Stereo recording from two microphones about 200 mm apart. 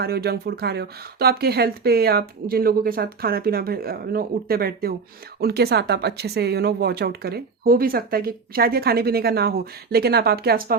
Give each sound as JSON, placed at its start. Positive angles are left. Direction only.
{"t": 0.0, "sound": "speech", "side_deg": -50}